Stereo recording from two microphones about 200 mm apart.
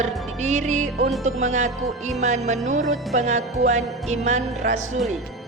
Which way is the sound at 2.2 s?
35° right (ahead or behind).